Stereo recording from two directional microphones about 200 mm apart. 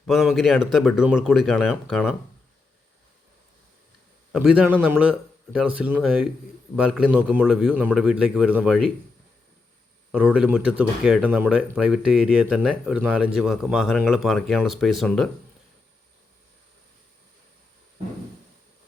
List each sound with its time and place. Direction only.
0.0 s speech: centre (ahead or behind)
4.3 s a man's voice: 5° right (ahead or behind)
10.1 s speech: 5° right (ahead or behind)